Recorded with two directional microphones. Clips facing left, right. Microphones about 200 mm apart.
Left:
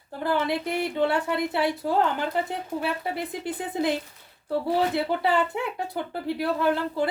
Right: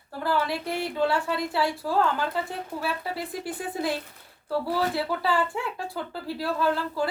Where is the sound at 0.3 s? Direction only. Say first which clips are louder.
Left 2 dB; 20° left (ahead or behind).